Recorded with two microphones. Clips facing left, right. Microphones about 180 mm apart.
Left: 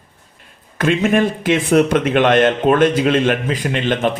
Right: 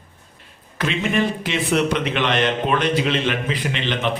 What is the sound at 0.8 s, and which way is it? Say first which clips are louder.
A man's voice: left 6 dB; 50° left (ahead or behind).